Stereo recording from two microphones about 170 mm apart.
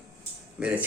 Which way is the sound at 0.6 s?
5° right (ahead or behind).